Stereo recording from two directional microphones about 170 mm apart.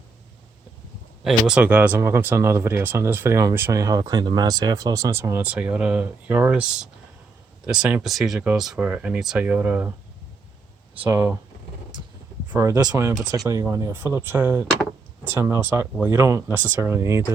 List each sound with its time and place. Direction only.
1.2 s speech: 5° right (ahead or behind)
11.0 s speech: 10° right (ahead or behind)
12.5 s speech: 15° right (ahead or behind)